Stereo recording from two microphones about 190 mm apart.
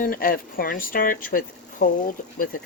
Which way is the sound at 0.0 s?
50° left (ahead or behind).